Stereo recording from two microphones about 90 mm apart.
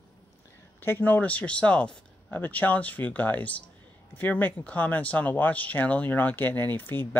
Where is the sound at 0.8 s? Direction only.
20° left (ahead or behind).